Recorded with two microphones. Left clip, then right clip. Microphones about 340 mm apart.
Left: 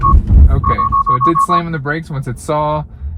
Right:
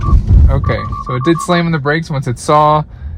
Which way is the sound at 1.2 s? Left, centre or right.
Right.